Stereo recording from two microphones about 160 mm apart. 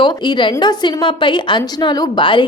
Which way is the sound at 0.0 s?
30° left (ahead or behind).